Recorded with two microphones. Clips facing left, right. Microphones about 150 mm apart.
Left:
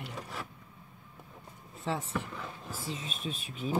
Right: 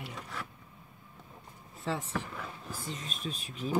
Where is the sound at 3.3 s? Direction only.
40° right (ahead or behind).